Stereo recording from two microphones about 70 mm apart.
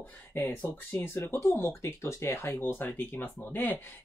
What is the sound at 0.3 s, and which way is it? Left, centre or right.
Speech, left.